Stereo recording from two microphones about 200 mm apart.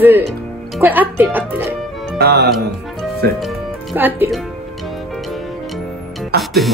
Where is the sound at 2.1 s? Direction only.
50° right (ahead or behind).